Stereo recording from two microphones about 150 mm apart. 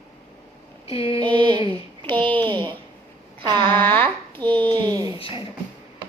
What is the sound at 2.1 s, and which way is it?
Speech, 10° left (ahead or behind).